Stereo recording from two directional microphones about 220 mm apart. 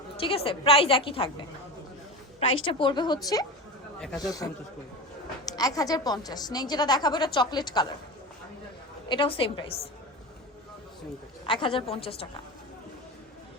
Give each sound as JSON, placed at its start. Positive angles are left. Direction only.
{"t": 0.2, "sound": "a woman's voice", "side_deg": 25}
{"t": 2.6, "sound": "a woman's voice", "side_deg": 20}
{"t": 5.5, "sound": "a woman's voice", "side_deg": 15}
{"t": 9.0, "sound": "a woman's voice", "side_deg": 25}
{"t": 11.4, "sound": "a woman's voice", "side_deg": 25}